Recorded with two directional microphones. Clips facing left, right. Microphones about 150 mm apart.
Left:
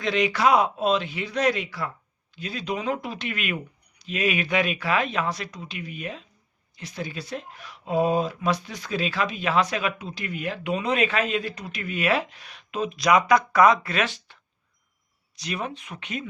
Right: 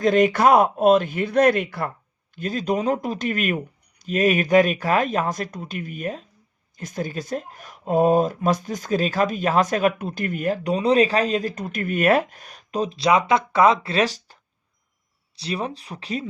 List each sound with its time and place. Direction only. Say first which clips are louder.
0.0 s speech: right 6 dB; 45° right (ahead or behind)
15.4 s speech: right 4 dB; 30° right (ahead or behind)